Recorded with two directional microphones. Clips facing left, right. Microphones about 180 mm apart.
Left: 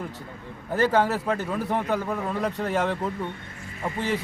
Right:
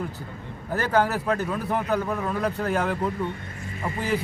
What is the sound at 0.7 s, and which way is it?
A man's voice, centre (ahead or behind).